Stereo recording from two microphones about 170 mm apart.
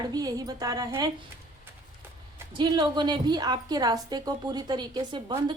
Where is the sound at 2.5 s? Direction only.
25° right (ahead or behind).